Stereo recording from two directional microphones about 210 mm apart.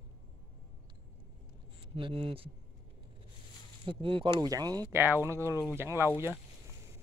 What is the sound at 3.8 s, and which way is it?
Speech, 25° right (ahead or behind).